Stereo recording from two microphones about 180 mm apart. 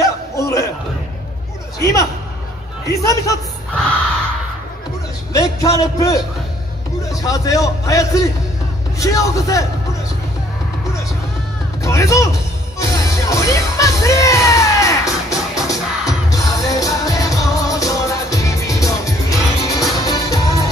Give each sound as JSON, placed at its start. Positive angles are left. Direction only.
{"t": 0.4, "sound": "a sound", "side_deg": 15}
{"t": 1.8, "sound": "a man's voice", "side_deg": 15}
{"t": 5.3, "sound": "a man's voice", "side_deg": 20}
{"t": 11.8, "sound": "speech", "side_deg": 15}
{"t": 12.7, "sound": "music", "side_deg": 15}